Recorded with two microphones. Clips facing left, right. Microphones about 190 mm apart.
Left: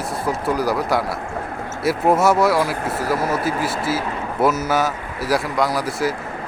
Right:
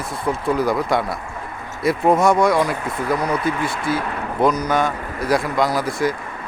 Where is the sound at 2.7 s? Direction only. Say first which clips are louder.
Left 2 dB; 75° left (ahead or behind).